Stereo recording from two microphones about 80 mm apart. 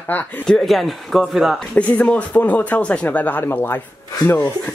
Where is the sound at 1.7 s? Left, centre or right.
Centre.